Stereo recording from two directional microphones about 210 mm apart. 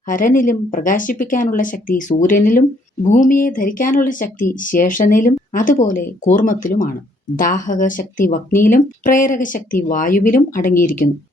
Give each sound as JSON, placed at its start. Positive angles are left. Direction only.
{"t": 0.1, "sound": "a woman's voice", "side_deg": 40}